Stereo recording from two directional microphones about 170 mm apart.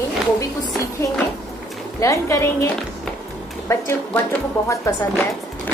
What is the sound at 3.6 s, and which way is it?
A woman's voice, 15° left (ahead or behind).